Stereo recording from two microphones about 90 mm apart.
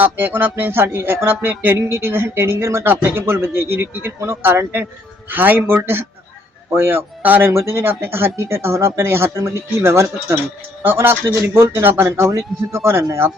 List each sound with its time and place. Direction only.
0.0 s speech: 20° right (ahead or behind)